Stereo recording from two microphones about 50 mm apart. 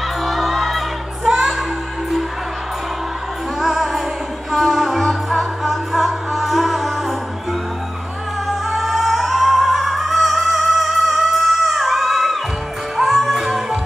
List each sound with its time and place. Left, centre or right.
0.2 s music: centre
3.6 s music: centre
8.5 s music: centre